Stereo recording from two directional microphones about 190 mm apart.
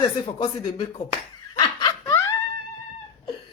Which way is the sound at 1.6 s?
20° left (ahead or behind).